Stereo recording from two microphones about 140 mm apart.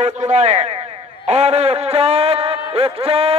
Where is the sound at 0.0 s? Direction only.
55° right (ahead or behind).